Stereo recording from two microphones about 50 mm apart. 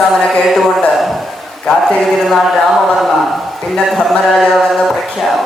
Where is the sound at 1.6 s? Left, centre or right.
Centre.